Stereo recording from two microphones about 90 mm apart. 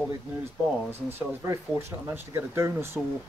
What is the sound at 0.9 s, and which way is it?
Speech, 30° right (ahead or behind).